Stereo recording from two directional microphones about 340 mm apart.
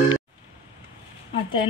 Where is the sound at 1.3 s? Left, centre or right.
Centre.